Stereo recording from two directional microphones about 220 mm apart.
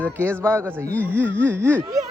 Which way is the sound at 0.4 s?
5° left (ahead or behind).